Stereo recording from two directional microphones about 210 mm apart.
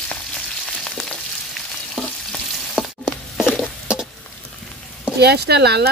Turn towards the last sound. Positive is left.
turn(degrees=-50)  # may be behind; listen again after turning